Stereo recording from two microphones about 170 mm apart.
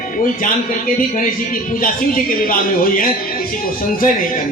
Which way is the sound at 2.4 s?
55° left (ahead or behind).